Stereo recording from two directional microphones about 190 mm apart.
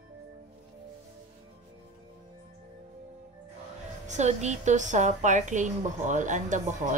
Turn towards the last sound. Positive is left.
turn(degrees=-40)  # may be behind; listen again after turning